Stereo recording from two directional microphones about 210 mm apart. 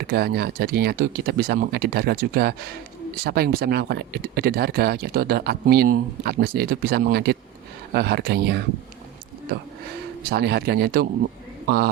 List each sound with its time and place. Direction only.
0.0 s speech: 50° right (ahead or behind)
10.2 s speech: 50° right (ahead or behind)